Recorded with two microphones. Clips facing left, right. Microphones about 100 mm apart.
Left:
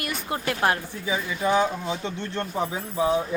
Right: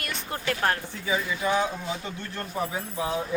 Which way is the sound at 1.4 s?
30° left (ahead or behind).